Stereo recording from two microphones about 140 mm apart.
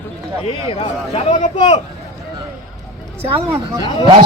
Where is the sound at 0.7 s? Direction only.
40° left (ahead or behind).